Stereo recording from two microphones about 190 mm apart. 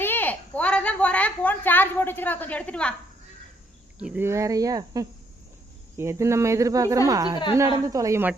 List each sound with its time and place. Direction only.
0.0 s a woman's voice: 10° left (ahead or behind)
3.9 s a woman's voice: 5° right (ahead or behind)